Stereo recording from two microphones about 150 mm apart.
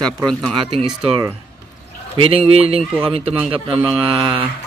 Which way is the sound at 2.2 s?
40° right (ahead or behind).